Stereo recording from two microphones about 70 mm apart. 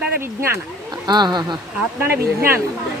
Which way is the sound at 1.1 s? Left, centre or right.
Right.